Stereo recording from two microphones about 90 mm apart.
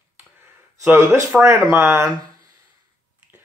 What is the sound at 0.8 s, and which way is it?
Speech, 20° right (ahead or behind).